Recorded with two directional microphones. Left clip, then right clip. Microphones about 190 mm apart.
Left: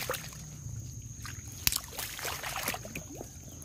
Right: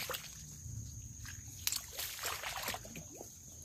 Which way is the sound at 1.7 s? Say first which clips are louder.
Left 7 dB; 30° left (ahead or behind).